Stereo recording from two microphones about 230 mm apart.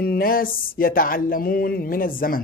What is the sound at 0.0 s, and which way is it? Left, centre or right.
Mantra, left.